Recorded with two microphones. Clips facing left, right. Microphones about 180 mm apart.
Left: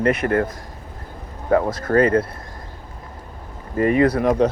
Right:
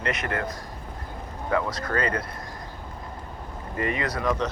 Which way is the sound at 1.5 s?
50° left (ahead or behind).